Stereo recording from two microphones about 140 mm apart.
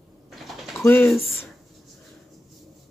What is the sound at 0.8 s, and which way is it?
Speech, 15° left (ahead or behind).